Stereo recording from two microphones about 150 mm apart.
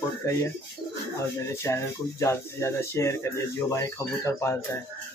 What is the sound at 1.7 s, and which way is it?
Speech, 20° left (ahead or behind).